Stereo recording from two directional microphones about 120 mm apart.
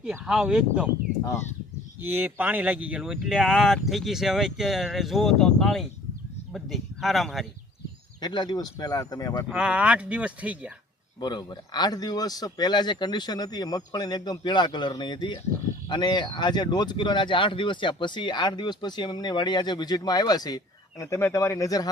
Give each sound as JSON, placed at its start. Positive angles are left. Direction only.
{"t": 0.3, "sound": "speech", "side_deg": -5}
{"t": 1.2, "sound": "speech", "side_deg": 25}
{"t": 2.0, "sound": "speech", "side_deg": -15}
{"t": 8.2, "sound": "speech", "side_deg": 40}
{"t": 9.5, "sound": "speech", "side_deg": -10}
{"t": 11.2, "sound": "speech", "side_deg": 35}